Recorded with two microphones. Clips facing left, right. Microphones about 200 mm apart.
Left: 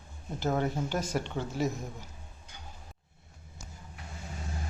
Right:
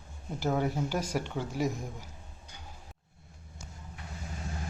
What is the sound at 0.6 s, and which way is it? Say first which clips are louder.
Speech: even; 10° right (ahead or behind).